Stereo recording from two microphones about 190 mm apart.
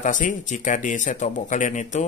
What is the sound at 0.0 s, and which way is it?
Speech, 40° left (ahead or behind).